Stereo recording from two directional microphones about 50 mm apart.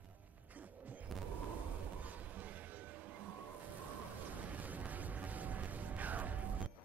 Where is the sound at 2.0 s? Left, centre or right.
Right.